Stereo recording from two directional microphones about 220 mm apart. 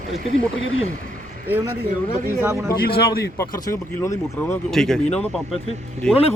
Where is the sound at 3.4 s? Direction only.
15° left (ahead or behind).